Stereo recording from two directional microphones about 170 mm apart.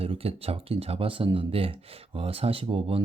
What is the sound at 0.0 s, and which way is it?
Speech, 35° right (ahead or behind).